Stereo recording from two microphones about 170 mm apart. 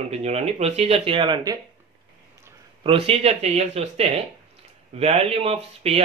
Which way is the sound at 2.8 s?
35° right (ahead or behind).